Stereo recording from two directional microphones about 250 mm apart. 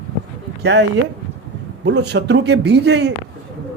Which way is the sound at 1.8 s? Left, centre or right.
Right.